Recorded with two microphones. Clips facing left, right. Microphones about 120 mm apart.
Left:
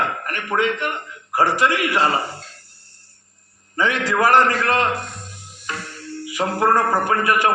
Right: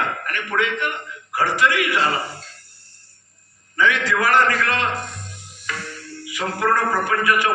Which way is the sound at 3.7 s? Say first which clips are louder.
Even; 40° left (ahead or behind).